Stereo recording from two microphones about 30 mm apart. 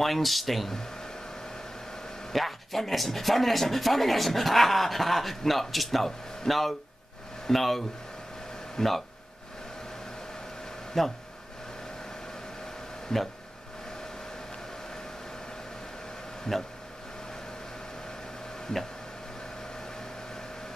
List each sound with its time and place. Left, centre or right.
0.0 s speech: centre
2.3 s speech: centre
8.8 s speech: centre
10.9 s speech: centre
13.1 s speech: centre